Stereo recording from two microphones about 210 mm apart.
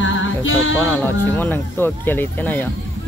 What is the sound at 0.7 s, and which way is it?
Speech, 10° left (ahead or behind).